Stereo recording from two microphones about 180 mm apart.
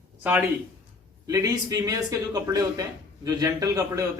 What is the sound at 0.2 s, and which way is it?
A man's voice, 10° right (ahead or behind).